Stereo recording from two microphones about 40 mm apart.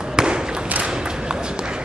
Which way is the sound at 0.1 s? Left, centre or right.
Centre.